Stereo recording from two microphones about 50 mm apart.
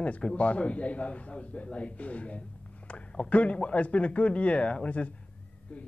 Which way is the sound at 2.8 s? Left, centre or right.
Left.